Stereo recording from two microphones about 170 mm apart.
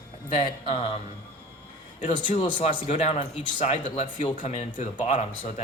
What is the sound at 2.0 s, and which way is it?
Speech, 30° left (ahead or behind).